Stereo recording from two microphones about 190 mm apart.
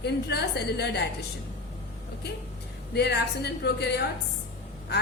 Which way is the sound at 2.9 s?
60° left (ahead or behind).